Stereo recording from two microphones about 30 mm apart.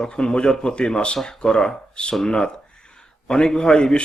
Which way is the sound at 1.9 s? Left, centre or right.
Left.